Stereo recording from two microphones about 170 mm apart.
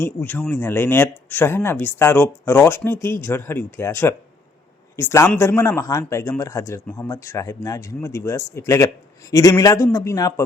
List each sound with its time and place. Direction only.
0.0 s a man's voice: 10° left (ahead or behind)